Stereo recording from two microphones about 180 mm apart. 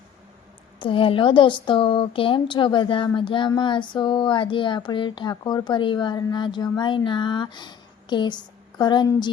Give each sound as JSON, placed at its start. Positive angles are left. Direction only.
{"t": 0.8, "sound": "speech", "side_deg": 30}